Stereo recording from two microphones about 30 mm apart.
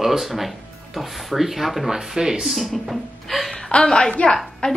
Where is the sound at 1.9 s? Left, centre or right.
Centre.